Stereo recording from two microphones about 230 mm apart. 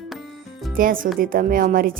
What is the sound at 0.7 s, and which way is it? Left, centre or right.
Speech, right.